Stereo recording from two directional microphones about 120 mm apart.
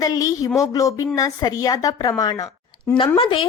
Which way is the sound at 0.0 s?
30° left (ahead or behind).